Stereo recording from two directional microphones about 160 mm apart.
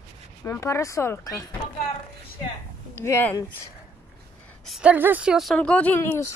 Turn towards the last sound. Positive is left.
turn(degrees=10)  # may be behind; listen again after turning